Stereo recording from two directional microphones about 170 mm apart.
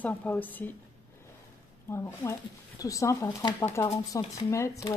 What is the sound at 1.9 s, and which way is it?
Speech, 15° left (ahead or behind).